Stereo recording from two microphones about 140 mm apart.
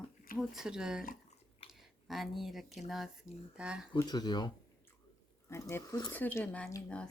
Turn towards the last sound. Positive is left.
turn(degrees=5)  # may be behind; listen again after turning